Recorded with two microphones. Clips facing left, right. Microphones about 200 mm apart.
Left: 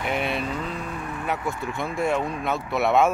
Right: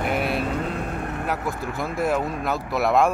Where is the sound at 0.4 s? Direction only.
50° right (ahead or behind).